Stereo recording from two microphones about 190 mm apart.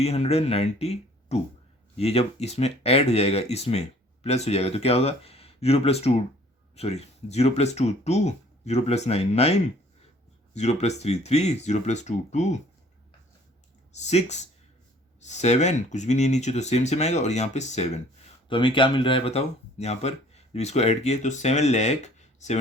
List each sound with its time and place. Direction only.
0.0 s speech: 35° left (ahead or behind)
14.0 s speech: 35° left (ahead or behind)